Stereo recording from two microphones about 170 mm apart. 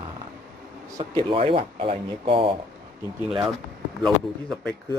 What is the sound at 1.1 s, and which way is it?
Speech, 30° right (ahead or behind).